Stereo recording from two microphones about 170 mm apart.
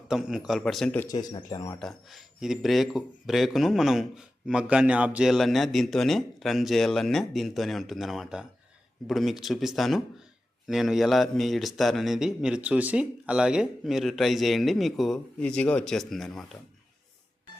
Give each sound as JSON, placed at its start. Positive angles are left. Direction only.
{"t": 0.1, "sound": "a man's voice", "side_deg": -5}
{"t": 0.9, "sound": "speech", "side_deg": 20}
{"t": 1.8, "sound": "a man's voice", "side_deg": 0}